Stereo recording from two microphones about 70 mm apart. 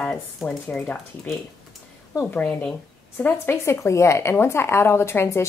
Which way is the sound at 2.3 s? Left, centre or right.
Centre.